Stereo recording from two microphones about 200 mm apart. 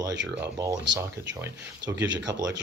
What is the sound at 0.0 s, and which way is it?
Speech, 15° right (ahead or behind).